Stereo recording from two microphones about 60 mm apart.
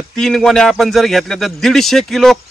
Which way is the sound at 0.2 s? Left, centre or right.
Centre.